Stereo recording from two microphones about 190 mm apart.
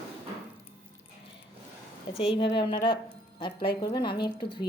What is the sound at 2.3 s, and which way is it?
A woman's voice, 25° left (ahead or behind).